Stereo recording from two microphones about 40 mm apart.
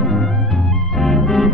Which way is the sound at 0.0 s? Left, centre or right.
Centre.